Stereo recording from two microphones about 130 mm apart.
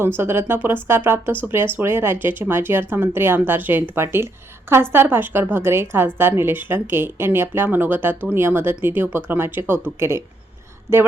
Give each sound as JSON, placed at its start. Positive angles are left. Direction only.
{"t": 0.2, "sound": "speech", "side_deg": -20}